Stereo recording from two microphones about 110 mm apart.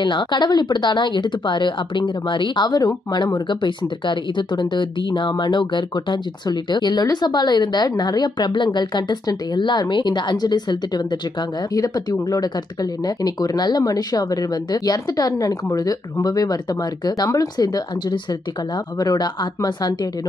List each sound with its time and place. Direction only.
0.0 s speech: 45° left (ahead or behind)